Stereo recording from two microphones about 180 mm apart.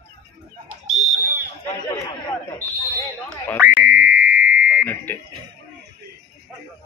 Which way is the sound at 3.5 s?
15° right (ahead or behind).